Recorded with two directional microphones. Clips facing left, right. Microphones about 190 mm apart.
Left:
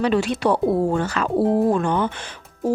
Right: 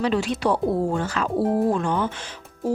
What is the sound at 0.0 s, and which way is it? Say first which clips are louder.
Speech: left 3 dB; 60° left (ahead or behind).